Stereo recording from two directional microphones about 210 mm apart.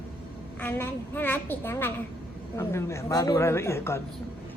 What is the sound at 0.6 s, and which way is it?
A woman's voice, 10° left (ahead or behind).